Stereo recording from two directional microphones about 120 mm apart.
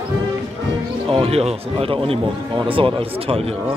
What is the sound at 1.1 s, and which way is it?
Speech, 55° right (ahead or behind).